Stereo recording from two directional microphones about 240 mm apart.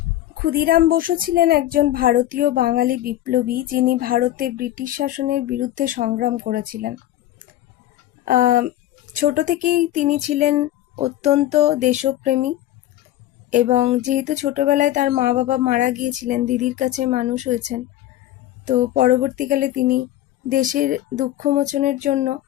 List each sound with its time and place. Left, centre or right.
0.3 s a woman's voice: right
9.1 s a sound: right
13.5 s a woman's voice: right